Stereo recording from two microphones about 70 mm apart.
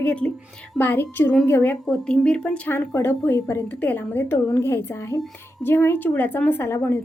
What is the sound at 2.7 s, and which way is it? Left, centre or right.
Speech, left.